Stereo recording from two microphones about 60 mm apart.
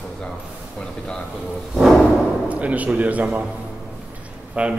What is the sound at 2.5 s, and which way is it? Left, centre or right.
Speech, right.